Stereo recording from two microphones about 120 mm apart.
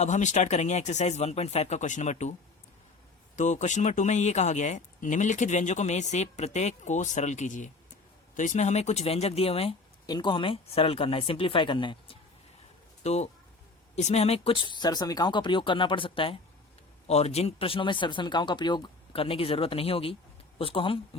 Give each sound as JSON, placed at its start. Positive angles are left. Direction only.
{"t": 0.0, "sound": "speech", "side_deg": 80}
{"t": 3.3, "sound": "speech", "side_deg": 90}
{"t": 10.1, "sound": "speech", "side_deg": 40}
{"t": 13.0, "sound": "speech", "side_deg": 65}
{"t": 17.1, "sound": "speech", "side_deg": 60}